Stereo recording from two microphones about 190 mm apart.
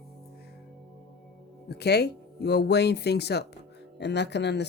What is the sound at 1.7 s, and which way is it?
Speech, 60° left (ahead or behind).